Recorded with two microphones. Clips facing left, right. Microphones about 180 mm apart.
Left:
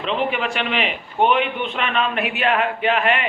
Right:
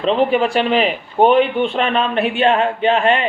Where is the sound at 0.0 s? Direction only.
35° right (ahead or behind).